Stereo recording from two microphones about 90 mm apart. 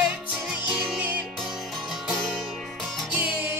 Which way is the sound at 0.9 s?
15° right (ahead or behind).